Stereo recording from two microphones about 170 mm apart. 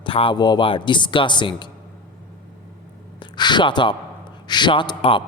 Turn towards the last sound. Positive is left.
turn(degrees=30)  # may be behind; listen again after turning